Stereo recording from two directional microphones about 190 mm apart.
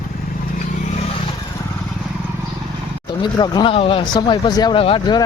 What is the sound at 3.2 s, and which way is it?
Speech, 20° left (ahead or behind).